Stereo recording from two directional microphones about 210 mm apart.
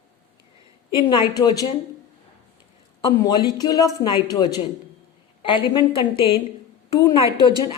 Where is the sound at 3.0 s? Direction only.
20° left (ahead or behind).